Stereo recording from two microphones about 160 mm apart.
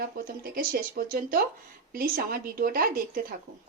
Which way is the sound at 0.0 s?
65° right (ahead or behind).